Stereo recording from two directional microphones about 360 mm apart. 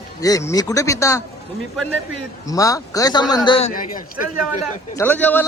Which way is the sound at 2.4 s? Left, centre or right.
Centre.